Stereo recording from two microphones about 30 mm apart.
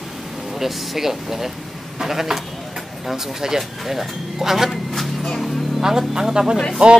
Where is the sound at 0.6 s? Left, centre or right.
Centre.